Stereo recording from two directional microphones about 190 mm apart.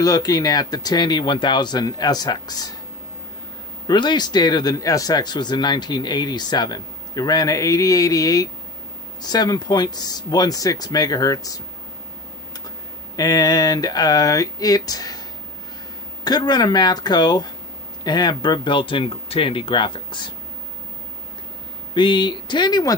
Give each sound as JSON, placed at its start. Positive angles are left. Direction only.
{"t": 0.0, "sound": "speech", "side_deg": 20}
{"t": 3.8, "sound": "speech", "side_deg": 25}
{"t": 13.1, "sound": "speech", "side_deg": 20}
{"t": 16.3, "sound": "speech", "side_deg": 20}
{"t": 21.9, "sound": "speech", "side_deg": 25}